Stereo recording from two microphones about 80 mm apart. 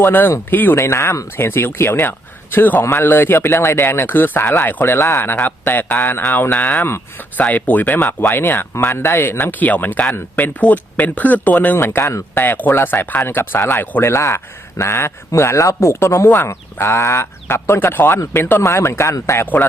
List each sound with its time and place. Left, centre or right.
0.0 s speech: left
11.9 s speech: left